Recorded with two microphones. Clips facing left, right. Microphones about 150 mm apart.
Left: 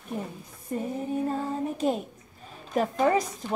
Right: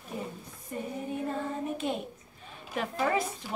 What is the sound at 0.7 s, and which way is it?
A woman's voice, 40° left (ahead or behind).